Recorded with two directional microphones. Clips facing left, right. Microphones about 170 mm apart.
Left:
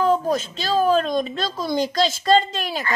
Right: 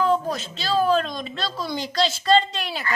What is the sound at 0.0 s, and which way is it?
A woman's voice, 45° left (ahead or behind).